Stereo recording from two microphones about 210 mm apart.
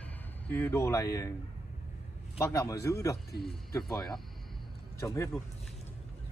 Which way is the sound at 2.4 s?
15° left (ahead or behind).